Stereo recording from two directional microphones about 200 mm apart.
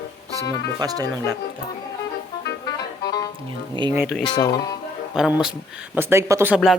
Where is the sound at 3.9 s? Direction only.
5° right (ahead or behind).